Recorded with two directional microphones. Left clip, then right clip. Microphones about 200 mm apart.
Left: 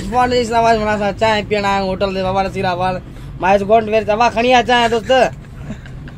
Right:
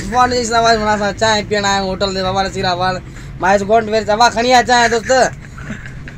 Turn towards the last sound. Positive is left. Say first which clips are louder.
# right 1 dB
turn(degrees=10)  # may be behind; listen again after turning